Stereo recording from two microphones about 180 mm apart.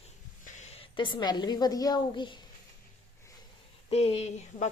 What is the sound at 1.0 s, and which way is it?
A woman's voice, 25° left (ahead or behind).